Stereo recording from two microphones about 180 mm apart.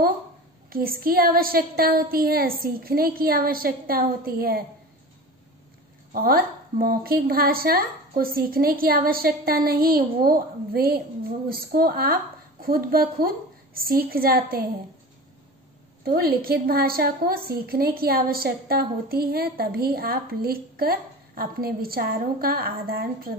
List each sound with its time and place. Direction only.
0.7 s a woman's voice: 55° right (ahead or behind)
6.1 s a woman's voice: 55° right (ahead or behind)
16.0 s a woman's voice: 55° right (ahead or behind)